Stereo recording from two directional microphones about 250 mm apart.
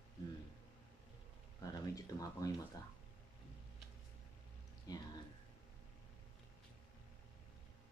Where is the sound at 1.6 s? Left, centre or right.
Centre.